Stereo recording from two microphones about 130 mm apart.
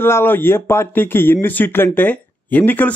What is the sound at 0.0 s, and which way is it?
Speech, 15° left (ahead or behind).